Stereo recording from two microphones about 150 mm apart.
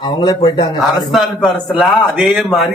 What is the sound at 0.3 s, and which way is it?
Speech, 40° left (ahead or behind).